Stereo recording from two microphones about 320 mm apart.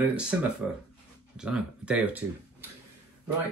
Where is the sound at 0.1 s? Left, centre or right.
Centre.